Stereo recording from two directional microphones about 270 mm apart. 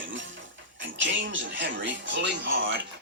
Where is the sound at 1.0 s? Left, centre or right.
Right.